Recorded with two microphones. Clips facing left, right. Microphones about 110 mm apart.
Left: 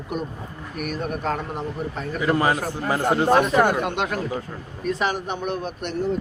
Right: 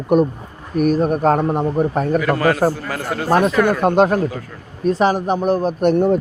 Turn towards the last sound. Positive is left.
turn(degrees=-60)  # may be behind; listen again after turning